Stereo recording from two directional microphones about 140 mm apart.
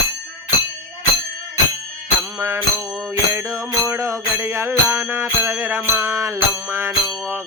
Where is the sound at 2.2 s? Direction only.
20° right (ahead or behind).